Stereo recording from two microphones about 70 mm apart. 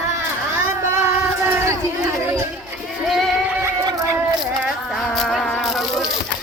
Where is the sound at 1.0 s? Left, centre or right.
Right.